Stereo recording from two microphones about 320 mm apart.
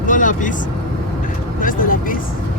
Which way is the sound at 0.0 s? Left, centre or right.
Left.